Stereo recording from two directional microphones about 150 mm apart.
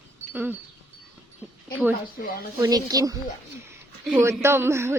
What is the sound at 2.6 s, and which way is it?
Speech, 25° right (ahead or behind).